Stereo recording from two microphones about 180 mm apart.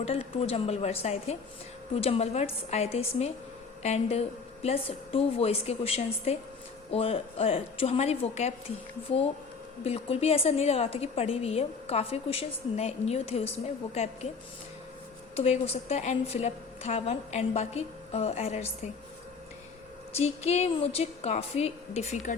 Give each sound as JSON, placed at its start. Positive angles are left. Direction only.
{"t": 0.0, "sound": "a woman's voice", "side_deg": 35}
{"t": 15.4, "sound": "a woman's voice", "side_deg": 35}
{"t": 20.1, "sound": "a woman's voice", "side_deg": 35}